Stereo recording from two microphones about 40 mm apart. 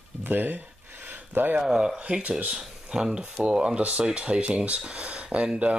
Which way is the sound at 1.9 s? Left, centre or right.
Right.